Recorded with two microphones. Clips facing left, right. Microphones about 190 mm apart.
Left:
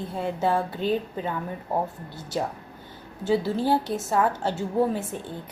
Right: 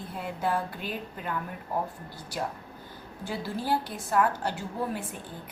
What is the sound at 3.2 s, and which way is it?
A woman's voice, 25° left (ahead or behind).